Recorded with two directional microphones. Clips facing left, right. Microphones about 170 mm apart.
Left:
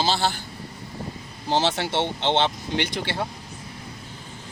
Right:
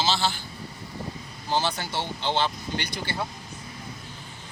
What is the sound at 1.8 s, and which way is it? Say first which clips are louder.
Speech: left 6 dB; 75° left (ahead or behind).